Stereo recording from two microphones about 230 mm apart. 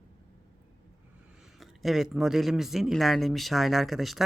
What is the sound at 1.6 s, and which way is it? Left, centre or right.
Speech, centre.